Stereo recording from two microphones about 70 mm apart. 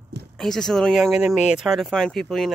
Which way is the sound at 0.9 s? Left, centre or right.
Centre.